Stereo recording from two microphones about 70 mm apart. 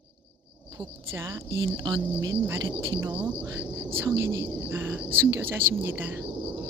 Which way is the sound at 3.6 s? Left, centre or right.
Right.